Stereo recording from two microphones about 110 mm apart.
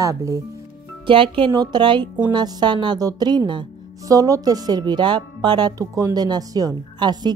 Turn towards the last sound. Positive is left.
turn(degrees=-40)  # may be behind; listen again after turning